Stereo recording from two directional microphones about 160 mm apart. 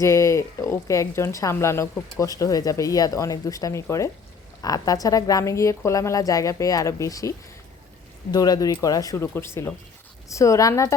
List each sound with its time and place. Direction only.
0.0 s speech: 20° left (ahead or behind)